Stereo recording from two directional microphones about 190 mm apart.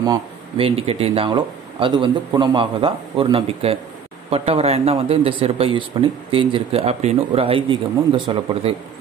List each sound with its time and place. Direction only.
0.0 s speech: 25° right (ahead or behind)